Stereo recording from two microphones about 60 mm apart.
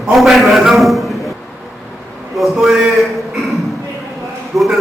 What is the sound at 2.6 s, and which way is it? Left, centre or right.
Speech, centre.